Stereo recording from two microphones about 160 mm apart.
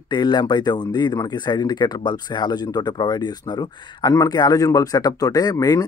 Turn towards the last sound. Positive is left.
turn(degrees=25)  # may be behind; listen again after turning